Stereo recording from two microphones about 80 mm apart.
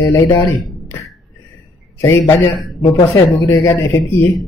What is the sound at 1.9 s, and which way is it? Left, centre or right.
Speech, left.